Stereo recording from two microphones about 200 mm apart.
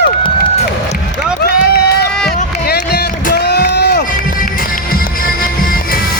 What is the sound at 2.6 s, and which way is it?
Rowboat, 55° left (ahead or behind).